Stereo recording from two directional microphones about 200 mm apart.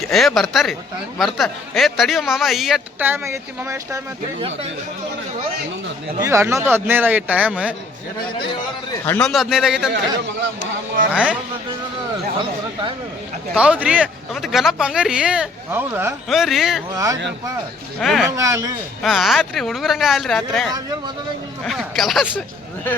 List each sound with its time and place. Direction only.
0.0 s a man's voice: centre (ahead or behind); by 4.0 s 15° right (ahead or behind)
4.4 s speech: 30° right (ahead or behind)
6.1 s a man's voice: 15° right (ahead or behind)
9.0 s a man's voice: 10° left (ahead or behind)
9.3 s a man's voice: centre (ahead or behind)
11.1 s a man's voice: 5° right (ahead or behind)
13.5 s a man's voice: 5° right (ahead or behind)
16.9 s a man's voice: 15° right (ahead or behind)
18.0 s a man's voice: centre (ahead or behind)
18.3 s a man's voice: 15° right (ahead or behind)
19.0 s a man's voice: centre (ahead or behind)